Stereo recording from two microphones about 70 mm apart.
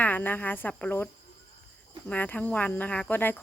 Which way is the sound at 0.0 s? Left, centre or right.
Left.